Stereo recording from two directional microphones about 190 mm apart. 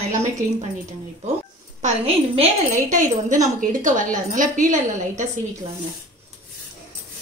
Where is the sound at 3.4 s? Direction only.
45° right (ahead or behind).